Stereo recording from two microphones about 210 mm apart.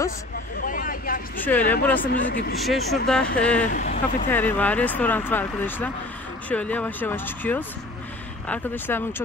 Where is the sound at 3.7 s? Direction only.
40° left (ahead or behind).